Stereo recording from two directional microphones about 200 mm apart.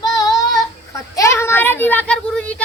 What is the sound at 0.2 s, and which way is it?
Child singing, 20° left (ahead or behind).